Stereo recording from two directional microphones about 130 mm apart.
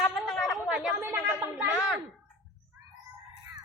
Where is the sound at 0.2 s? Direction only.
Centre (ahead or behind).